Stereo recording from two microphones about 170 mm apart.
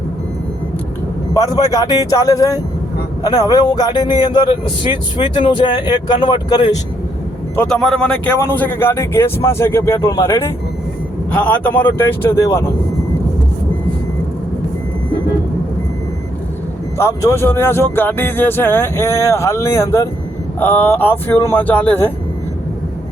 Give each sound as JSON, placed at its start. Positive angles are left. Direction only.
{"t": 1.3, "sound": "speech", "side_deg": 20}
{"t": 7.5, "sound": "speech", "side_deg": 5}
{"t": 17.0, "sound": "speech", "side_deg": 15}